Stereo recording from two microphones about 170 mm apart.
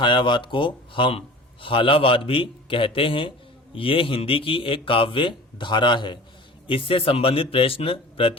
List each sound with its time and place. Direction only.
0.0 s speech: 30° left (ahead or behind)